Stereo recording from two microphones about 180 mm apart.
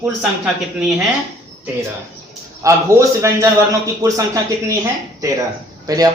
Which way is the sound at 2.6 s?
15° right (ahead or behind).